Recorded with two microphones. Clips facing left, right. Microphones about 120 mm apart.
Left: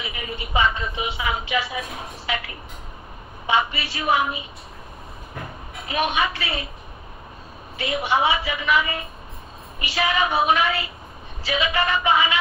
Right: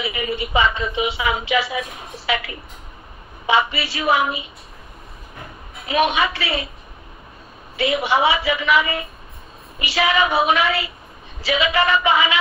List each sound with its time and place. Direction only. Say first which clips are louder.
0.0 s a woman's voice: right 8 dB; 90° right
5.9 s a woman's voice: right 4 dB; 90° right
7.7 s a woman's voice: right 4 dB; 90° right